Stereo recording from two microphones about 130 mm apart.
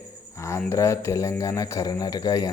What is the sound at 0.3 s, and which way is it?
Speech, 20° left (ahead or behind).